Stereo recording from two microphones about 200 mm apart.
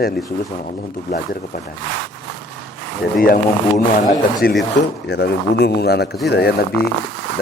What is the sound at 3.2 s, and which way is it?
A man's voice, 45° left (ahead or behind).